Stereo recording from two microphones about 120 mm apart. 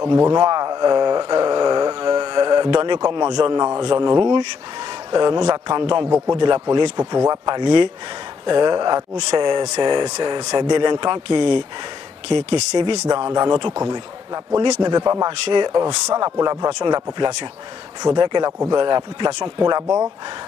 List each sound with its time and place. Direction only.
0.1 s speech: 30° right (ahead or behind)
6.0 s a man's voice: 20° right (ahead or behind)
6.3 s speech: 40° right (ahead or behind)
13.0 s speech: 30° right (ahead or behind)